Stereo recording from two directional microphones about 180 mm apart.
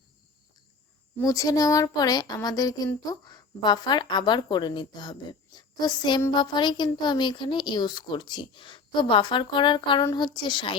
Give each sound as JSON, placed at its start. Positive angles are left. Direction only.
{"t": 1.2, "sound": "child singing", "side_deg": 20}